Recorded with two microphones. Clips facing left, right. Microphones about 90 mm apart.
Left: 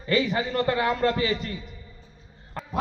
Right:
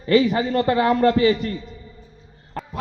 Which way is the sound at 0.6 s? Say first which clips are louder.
Right 7 dB; 55° right (ahead or behind).